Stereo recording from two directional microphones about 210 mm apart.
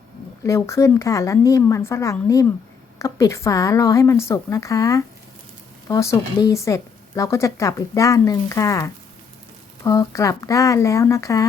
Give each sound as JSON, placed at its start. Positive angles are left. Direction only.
{"t": 0.4, "sound": "speech", "side_deg": 15}